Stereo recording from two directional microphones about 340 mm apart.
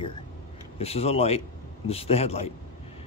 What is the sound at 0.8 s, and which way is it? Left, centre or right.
Speech, centre.